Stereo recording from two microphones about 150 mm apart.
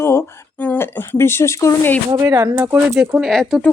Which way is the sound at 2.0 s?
25° right (ahead or behind).